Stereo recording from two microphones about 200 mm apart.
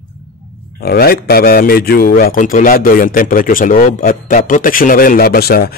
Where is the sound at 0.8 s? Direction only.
50° left (ahead or behind).